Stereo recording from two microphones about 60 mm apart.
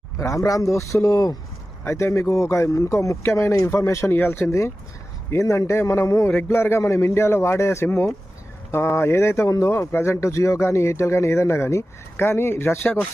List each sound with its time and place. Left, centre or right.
0.2 s speech: left
1.8 s speech: left
4.1 s speech: left
5.3 s speech: left
6.5 s speech: left
9.6 s speech: left